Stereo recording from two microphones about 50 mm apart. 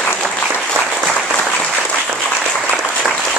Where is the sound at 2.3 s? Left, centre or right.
Centre.